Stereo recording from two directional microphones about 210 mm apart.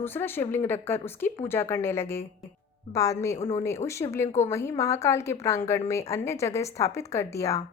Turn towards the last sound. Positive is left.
turn(degrees=15)  # may be behind; listen again after turning